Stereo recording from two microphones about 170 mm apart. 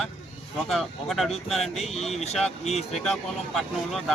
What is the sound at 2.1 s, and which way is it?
Speech, 40° left (ahead or behind).